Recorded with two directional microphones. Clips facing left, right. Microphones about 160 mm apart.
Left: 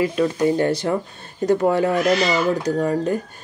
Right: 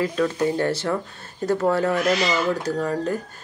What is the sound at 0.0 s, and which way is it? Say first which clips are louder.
Speech: left 3 dB; 15° left (ahead or behind).